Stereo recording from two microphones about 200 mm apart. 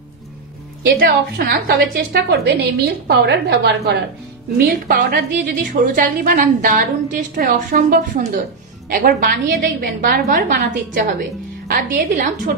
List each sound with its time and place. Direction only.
0.8 s a woman's voice: 50° right (ahead or behind)